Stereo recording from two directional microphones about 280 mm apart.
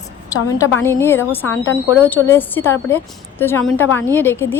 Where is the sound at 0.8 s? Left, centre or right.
Centre.